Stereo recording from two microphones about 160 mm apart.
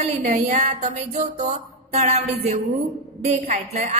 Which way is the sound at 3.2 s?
40° right (ahead or behind).